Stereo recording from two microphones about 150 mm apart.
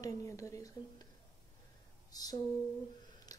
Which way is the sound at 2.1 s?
25° left (ahead or behind).